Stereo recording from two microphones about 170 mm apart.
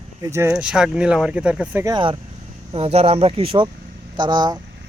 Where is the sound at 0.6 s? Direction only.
5° right (ahead or behind).